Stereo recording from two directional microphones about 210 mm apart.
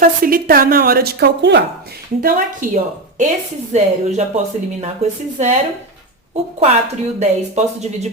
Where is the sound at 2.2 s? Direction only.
40° right (ahead or behind).